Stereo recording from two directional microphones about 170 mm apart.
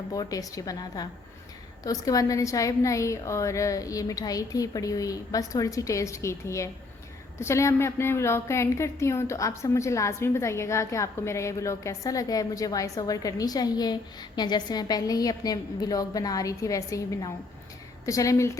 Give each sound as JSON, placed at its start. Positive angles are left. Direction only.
{"t": 0.1, "sound": "a woman's voice", "side_deg": 20}